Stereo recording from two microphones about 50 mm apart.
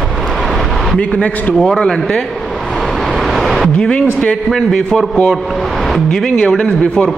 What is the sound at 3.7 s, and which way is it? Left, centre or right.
Speech, left.